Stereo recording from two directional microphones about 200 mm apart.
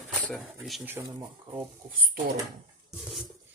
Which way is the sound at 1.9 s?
45° right (ahead or behind).